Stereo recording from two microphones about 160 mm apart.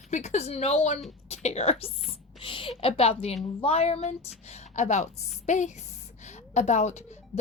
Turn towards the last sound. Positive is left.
turn(degrees=45)  # may be behind; listen again after turning